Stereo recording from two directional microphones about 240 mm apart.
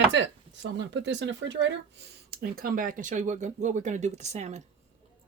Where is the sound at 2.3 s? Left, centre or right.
Right.